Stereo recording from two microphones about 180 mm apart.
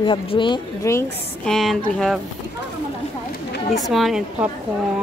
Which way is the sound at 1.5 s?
Centre (ahead or behind).